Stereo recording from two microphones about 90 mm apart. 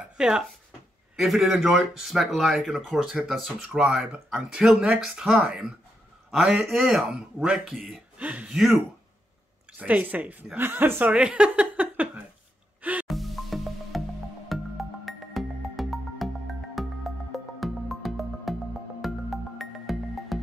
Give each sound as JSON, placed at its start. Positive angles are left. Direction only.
{"t": 1.1, "sound": "speech", "side_deg": 0}
{"t": 8.2, "sound": "speech", "side_deg": -15}
{"t": 8.5, "sound": "speech", "side_deg": -5}
{"t": 9.8, "sound": "speech", "side_deg": -20}
{"t": 13.0, "sound": "music", "side_deg": 0}